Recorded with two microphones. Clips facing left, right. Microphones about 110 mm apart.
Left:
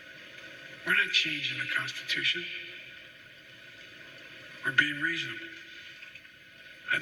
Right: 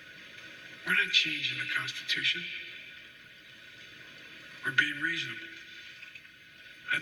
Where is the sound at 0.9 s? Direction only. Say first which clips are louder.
Left 2 dB; 40° left (ahead or behind).